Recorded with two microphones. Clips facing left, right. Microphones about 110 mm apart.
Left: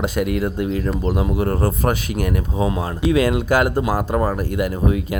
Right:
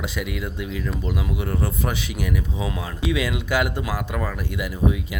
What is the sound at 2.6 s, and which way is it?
Speech, 30° left (ahead or behind).